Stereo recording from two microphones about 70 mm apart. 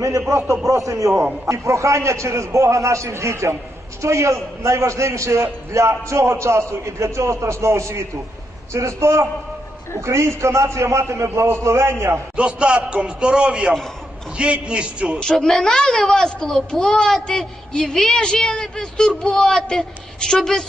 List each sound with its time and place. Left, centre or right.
0.7 s a man's voice: right
12.4 s a man's voice: centre
15.1 s a child's voice: centre